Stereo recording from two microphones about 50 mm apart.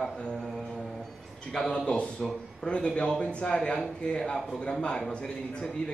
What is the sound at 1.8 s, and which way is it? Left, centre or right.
A man's voice, left.